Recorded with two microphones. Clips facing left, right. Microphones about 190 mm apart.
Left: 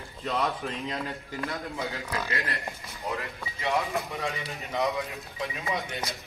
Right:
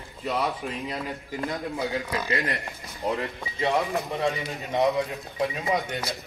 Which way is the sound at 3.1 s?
35° right (ahead or behind).